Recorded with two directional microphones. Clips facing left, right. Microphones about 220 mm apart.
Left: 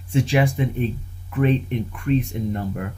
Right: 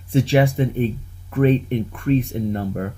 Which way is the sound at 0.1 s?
30° right (ahead or behind).